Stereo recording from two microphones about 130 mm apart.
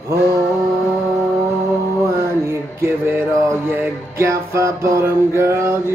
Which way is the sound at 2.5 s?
20° right (ahead or behind).